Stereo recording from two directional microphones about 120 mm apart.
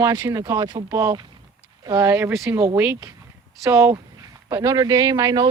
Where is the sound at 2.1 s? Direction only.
20° right (ahead or behind).